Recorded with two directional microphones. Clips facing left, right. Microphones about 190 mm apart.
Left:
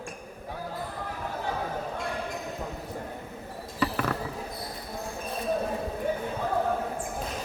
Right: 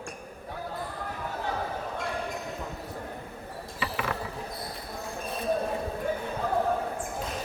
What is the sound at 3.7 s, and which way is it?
Mechanisms, 45° left (ahead or behind).